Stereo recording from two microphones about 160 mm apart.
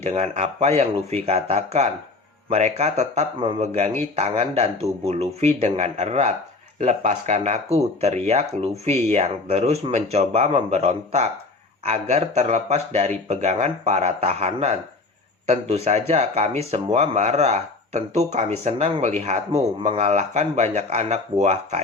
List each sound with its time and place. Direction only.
0.0 s speech: 40° right (ahead or behind)